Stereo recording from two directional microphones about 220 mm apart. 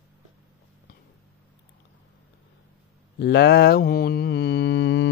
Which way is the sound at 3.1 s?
50° left (ahead or behind).